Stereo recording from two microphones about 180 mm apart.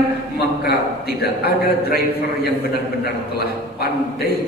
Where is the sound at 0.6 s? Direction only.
60° left (ahead or behind).